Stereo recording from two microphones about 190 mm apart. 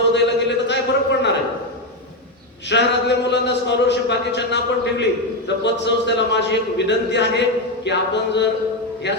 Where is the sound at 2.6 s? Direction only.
65° left (ahead or behind).